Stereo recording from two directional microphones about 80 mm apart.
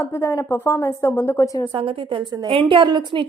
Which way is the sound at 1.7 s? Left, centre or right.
Right.